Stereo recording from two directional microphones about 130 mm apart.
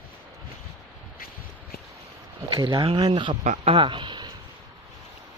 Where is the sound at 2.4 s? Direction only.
40° right (ahead or behind).